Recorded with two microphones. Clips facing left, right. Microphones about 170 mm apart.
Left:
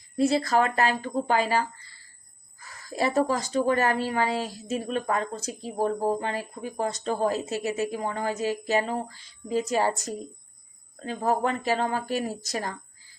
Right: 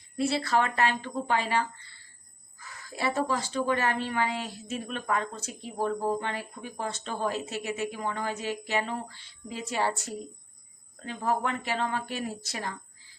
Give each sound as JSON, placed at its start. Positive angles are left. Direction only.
{"t": 0.2, "sound": "speech", "side_deg": 40}